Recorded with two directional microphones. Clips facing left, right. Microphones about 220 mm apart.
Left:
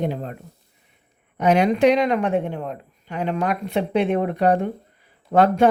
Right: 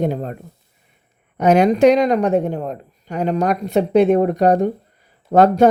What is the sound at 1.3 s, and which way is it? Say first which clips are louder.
Speech: right 4 dB; 45° right (ahead or behind).